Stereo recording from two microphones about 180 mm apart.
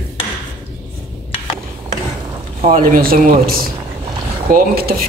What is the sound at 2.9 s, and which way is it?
Speech, 55° right (ahead or behind).